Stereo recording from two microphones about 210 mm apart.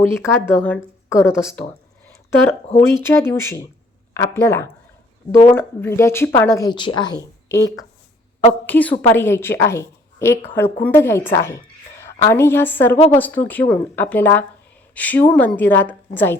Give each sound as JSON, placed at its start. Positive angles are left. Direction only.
{"t": 0.1, "sound": "a woman's voice", "side_deg": 10}
{"t": 3.0, "sound": "a woman's voice", "side_deg": 10}